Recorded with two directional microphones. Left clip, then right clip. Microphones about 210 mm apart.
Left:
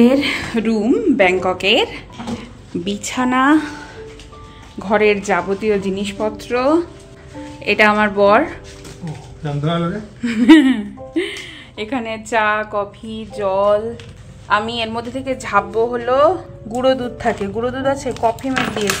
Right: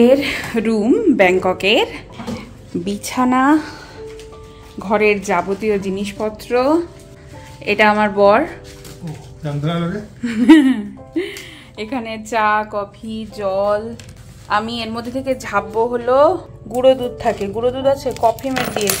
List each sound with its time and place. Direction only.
0.0 s a woman's voice: 10° right (ahead or behind)
4.7 s a woman's voice: 5° right (ahead or behind)
12.3 s music: centre (ahead or behind)
15.9 s a woman's voice: 10° right (ahead or behind)